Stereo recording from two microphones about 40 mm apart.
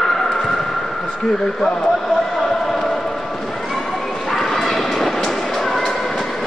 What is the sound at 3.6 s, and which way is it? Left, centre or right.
Bow-wow, centre.